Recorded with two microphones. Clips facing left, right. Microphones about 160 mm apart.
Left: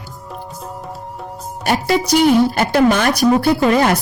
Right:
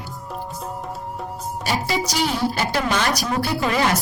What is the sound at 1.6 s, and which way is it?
Speech, 55° left (ahead or behind).